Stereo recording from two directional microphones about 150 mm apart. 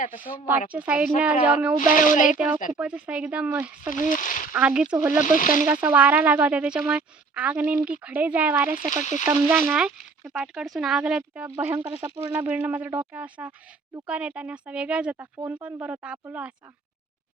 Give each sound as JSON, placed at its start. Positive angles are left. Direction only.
{"t": 0.7, "sound": "speech", "side_deg": -10}
{"t": 1.9, "sound": "speech", "side_deg": 60}
{"t": 2.7, "sound": "speech", "side_deg": -10}
{"t": 3.8, "sound": "speech", "side_deg": 60}
{"t": 4.5, "sound": "speech", "side_deg": -5}
{"t": 5.2, "sound": "speech", "side_deg": 60}
{"t": 5.6, "sound": "speech", "side_deg": -10}
{"t": 8.9, "sound": "speech", "side_deg": 55}
{"t": 9.2, "sound": "speech", "side_deg": -10}
{"t": 11.4, "sound": "speech", "side_deg": -20}